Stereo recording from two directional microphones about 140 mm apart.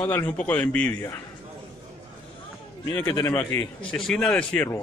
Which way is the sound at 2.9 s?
20° left (ahead or behind).